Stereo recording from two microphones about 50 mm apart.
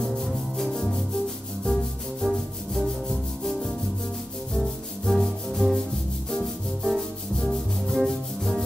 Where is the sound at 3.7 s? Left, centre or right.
Centre.